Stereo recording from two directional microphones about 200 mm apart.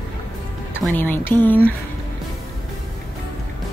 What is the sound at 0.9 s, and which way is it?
Speech, 10° left (ahead or behind).